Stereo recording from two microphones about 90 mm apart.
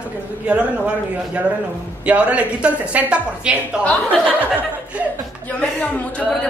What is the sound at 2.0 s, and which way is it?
A woman's voice, 15° right (ahead or behind).